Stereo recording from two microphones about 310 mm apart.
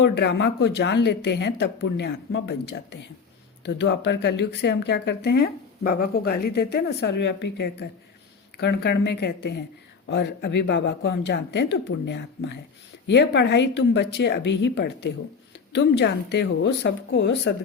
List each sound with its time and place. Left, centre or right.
0.0 s speech: left